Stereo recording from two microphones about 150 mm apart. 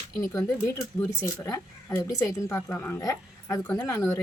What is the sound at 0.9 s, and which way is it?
A woman's voice, 20° left (ahead or behind).